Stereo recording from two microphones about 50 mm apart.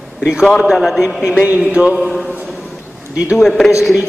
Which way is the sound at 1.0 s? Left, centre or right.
Centre.